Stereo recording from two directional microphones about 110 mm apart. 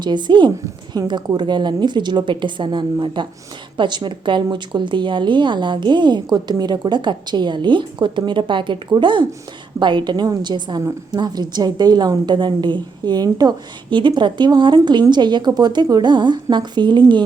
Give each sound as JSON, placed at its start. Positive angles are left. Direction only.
{"t": 0.0, "sound": "a woman's voice", "side_deg": -45}